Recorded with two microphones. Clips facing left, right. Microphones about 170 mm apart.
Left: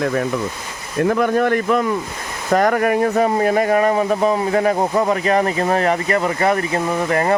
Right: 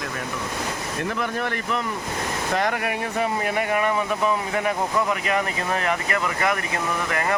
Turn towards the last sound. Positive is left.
turn(degrees=35)  # may be behind; listen again after turning